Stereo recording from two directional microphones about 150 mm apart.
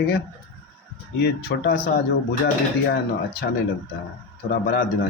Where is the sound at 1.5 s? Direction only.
80° left.